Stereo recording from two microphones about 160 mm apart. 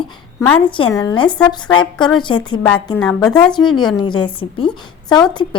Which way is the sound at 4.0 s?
30° left (ahead or behind).